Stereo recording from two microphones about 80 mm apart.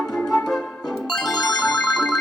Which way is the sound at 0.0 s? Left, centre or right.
Centre.